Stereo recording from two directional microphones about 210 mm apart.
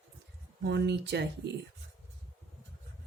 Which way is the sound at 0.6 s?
55° right (ahead or behind).